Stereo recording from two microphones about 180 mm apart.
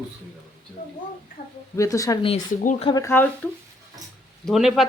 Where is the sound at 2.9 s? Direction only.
15° left (ahead or behind).